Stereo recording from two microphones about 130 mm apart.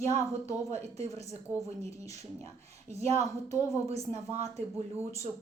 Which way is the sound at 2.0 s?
60° right (ahead or behind).